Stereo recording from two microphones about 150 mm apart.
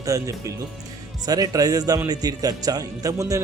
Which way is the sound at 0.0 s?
20° right (ahead or behind).